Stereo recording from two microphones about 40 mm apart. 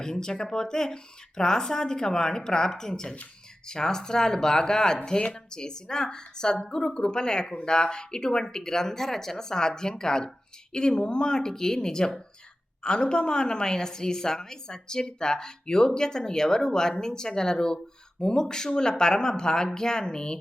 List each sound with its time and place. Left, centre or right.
0.0 s a woman's voice: centre